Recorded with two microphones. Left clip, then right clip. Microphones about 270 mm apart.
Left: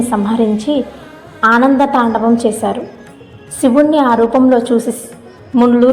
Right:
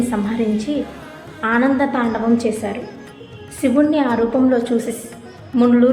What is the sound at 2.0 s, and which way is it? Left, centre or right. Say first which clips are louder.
Speech: left 7 dB; centre.